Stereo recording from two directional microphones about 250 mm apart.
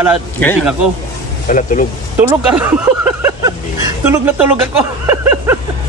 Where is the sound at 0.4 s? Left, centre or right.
Centre.